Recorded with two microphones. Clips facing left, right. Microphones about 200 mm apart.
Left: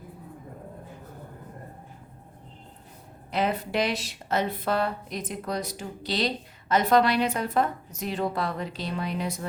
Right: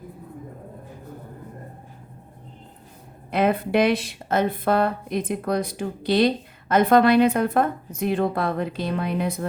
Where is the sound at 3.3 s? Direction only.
55° right (ahead or behind).